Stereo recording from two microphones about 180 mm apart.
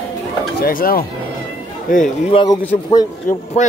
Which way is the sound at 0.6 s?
55° left (ahead or behind).